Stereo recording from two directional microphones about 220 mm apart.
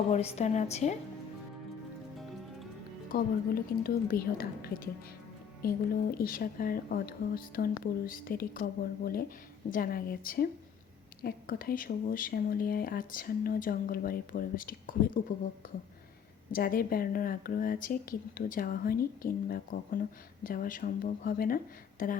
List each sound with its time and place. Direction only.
0.1 s speech: 30° left (ahead or behind)
3.1 s a woman's voice: 40° left (ahead or behind)
16.5 s speech: 40° left (ahead or behind)